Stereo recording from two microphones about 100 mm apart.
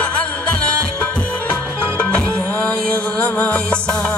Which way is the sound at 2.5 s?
10° left (ahead or behind).